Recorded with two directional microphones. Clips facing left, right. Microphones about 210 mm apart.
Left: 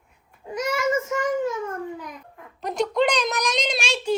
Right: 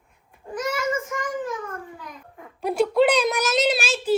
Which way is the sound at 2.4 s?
10° right (ahead or behind).